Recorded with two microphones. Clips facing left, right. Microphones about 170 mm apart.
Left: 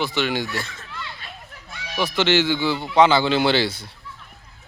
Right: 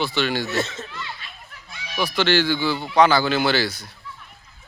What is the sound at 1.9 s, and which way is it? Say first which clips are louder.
Speech: left 1 dB; 20° left (ahead or behind).